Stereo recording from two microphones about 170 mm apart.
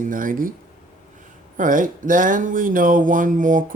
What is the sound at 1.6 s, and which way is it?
Speech, 50° right (ahead or behind).